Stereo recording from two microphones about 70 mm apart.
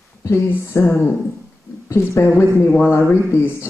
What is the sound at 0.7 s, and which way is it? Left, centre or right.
A woman's voice, left.